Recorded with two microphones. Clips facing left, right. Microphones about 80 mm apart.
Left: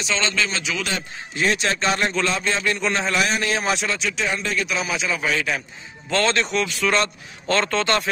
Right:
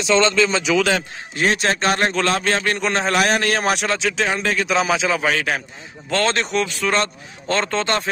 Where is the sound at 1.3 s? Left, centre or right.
Right.